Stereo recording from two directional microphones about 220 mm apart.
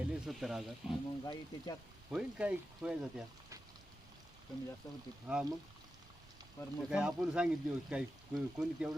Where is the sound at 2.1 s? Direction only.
5° right (ahead or behind).